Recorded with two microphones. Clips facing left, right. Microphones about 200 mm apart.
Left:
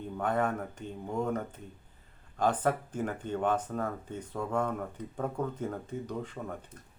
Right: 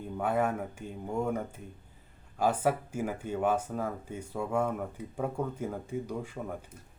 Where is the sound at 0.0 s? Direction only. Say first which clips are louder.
Right 1 dB; 10° right (ahead or behind).